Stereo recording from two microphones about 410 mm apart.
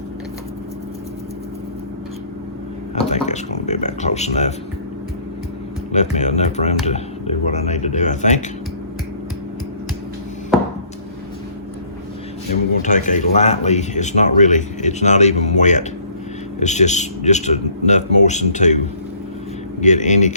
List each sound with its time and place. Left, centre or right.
2.9 s speech: centre
5.9 s speech: centre
12.8 s speech: centre
19.8 s speech: centre